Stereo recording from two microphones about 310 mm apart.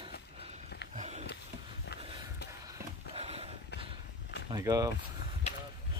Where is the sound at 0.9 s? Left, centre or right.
Right.